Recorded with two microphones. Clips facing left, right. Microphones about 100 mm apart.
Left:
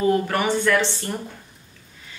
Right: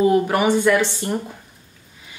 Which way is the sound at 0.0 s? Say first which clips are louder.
Right 4 dB; 15° right (ahead or behind).